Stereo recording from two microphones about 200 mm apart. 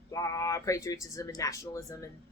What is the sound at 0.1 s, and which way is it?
Speech, 15° left (ahead or behind).